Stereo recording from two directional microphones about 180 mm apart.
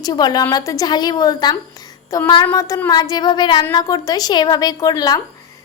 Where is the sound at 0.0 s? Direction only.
20° left (ahead or behind).